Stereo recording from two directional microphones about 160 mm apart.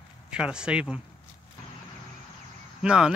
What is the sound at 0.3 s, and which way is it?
Speech, 5° right (ahead or behind).